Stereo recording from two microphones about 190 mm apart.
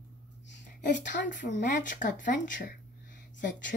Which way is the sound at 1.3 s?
40° left (ahead or behind).